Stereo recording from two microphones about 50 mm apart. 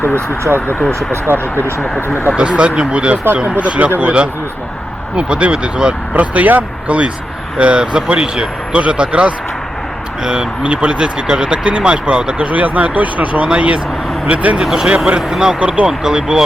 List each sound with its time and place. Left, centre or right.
0.0 s speech: left
0.9 s speech: right
1.8 s speech: left
2.3 s speech: centre
6.1 s speech: right; by 15.5 s centre
15.5 s speech: right
15.9 s speech: centre